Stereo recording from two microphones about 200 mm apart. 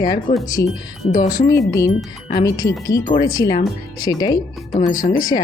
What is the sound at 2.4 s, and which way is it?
Speech, 20° left (ahead or behind).